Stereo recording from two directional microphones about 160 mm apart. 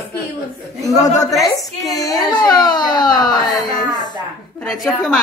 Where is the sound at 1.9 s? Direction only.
20° left (ahead or behind).